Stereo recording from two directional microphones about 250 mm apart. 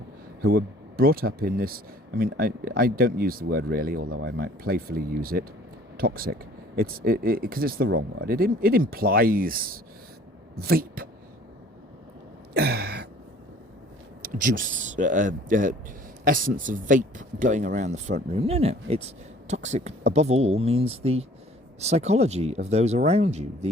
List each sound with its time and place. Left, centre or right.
0.4 s speech: right
12.5 s gasp: right
14.2 s speech: right